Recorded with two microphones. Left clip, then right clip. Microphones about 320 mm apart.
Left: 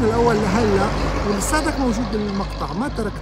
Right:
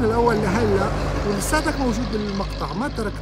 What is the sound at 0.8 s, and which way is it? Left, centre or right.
Speech, left.